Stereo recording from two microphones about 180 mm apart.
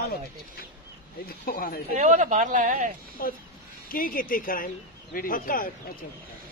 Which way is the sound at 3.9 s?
50° left (ahead or behind).